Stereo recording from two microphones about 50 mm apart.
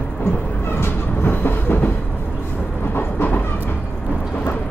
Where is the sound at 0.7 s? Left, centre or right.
Left.